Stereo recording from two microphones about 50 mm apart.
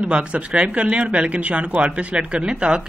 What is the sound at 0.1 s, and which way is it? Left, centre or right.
Speech, right.